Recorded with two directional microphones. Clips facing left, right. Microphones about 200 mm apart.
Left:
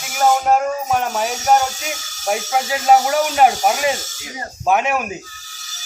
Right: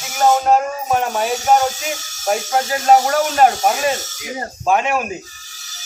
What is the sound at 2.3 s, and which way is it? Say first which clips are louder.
Speech: right 1 dB; 5° left (ahead or behind).